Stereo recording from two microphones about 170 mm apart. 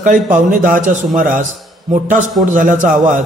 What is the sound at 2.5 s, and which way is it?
Speech, 50° right (ahead or behind).